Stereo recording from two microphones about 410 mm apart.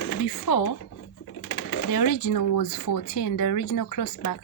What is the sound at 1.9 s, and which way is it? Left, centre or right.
Speech, left.